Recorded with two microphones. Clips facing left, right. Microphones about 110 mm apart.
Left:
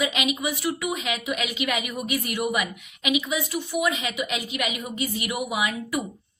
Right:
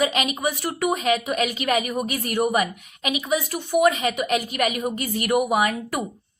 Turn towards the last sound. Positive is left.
turn(degrees=-50)  # may be behind; listen again after turning